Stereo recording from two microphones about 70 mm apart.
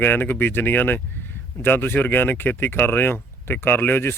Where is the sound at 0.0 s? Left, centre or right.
Left.